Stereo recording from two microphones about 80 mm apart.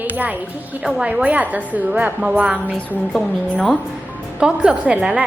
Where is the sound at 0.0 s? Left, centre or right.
Right.